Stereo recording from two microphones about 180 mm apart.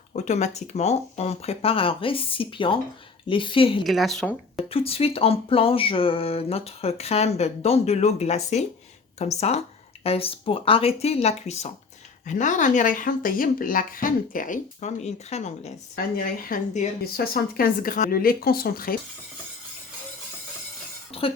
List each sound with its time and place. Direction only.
0.2 s speech: 40° left (ahead or behind)
3.8 s speech: centre (ahead or behind)
4.7 s speech: 35° left (ahead or behind)
16.0 s speech: 55° left (ahead or behind)
17.0 s speech: 60° left (ahead or behind)
21.1 s a sound: 30° left (ahead or behind)